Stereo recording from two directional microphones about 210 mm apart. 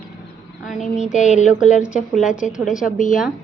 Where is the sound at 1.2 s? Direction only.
35° left (ahead or behind).